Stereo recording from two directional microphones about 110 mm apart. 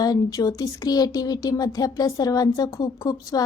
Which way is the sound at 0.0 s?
35° left (ahead or behind).